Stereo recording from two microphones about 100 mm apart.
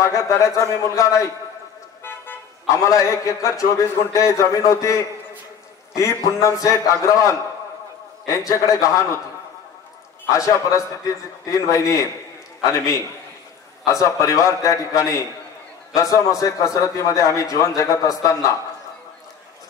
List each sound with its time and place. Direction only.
0.0 s a man's voice: 30° left (ahead or behind)
10.2 s a man's voice: 35° left (ahead or behind)